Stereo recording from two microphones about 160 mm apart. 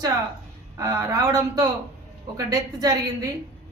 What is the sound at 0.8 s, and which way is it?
Speech, 20° right (ahead or behind).